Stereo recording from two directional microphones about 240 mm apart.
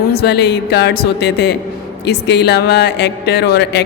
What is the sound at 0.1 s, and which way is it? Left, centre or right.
Speech, left.